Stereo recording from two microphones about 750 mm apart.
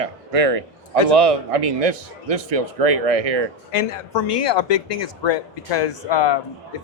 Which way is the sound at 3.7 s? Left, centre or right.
Left.